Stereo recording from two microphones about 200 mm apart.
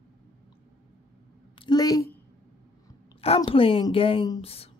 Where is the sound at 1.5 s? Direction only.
25° left (ahead or behind).